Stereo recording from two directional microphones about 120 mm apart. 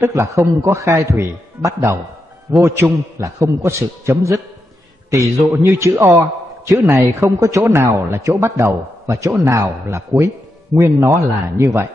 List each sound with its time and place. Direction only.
0.0 s a man's voice: 25° right (ahead or behind)